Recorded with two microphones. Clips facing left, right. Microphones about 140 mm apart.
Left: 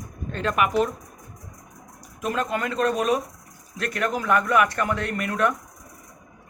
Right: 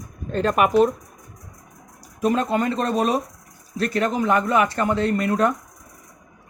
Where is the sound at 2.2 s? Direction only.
35° right (ahead or behind).